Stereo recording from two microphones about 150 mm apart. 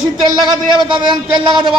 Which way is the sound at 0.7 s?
30° right (ahead or behind).